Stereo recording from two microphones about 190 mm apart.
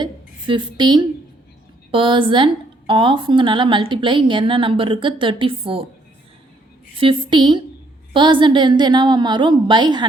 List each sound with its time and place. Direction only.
0.0 s a sound: 25° right (ahead or behind)
1.9 s a woman's voice: 25° right (ahead or behind)
7.0 s a woman's voice: 25° right (ahead or behind)